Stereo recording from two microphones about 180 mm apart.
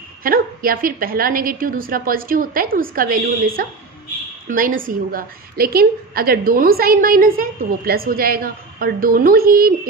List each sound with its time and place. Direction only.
0.2 s a woman's voice: 55° right (ahead or behind)